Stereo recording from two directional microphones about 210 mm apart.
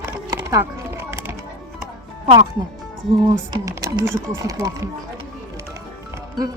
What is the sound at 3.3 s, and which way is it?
Speech, 15° right (ahead or behind).